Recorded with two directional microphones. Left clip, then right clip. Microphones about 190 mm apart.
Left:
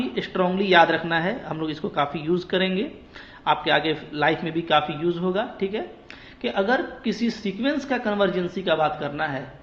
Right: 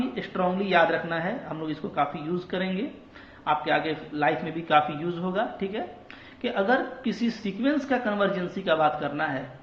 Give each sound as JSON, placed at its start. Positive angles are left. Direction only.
{"t": 0.1, "sound": "a woman's voice", "side_deg": 35}